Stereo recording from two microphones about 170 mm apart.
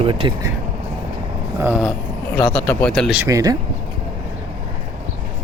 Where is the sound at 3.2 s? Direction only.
20° right (ahead or behind).